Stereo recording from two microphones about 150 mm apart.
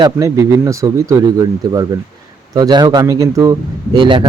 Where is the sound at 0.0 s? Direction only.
20° right (ahead or behind).